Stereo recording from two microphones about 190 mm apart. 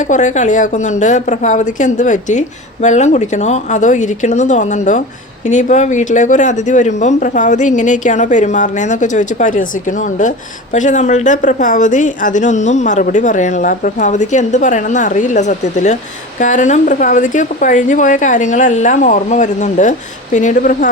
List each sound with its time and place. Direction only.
0.0 s speech: 40° left (ahead or behind)